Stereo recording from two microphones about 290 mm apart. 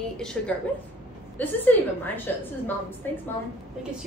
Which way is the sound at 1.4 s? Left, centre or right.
Centre.